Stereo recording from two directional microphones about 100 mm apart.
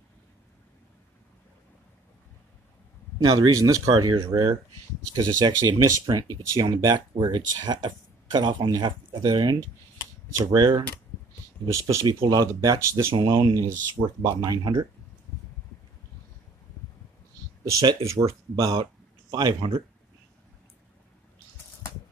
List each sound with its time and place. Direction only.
3.3 s speech: 35° right (ahead or behind)
11.6 s speech: 35° right (ahead or behind)
17.7 s speech: 35° right (ahead or behind)
19.3 s speech: 55° right (ahead or behind)